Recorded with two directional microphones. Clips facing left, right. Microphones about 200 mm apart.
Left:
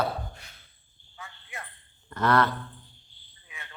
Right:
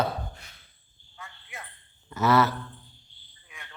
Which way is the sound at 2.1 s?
5° right (ahead or behind).